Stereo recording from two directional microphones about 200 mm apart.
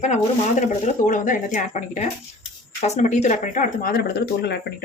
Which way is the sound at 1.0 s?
40° left (ahead or behind).